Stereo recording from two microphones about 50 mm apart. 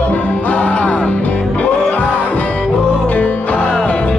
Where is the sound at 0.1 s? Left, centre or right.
Left.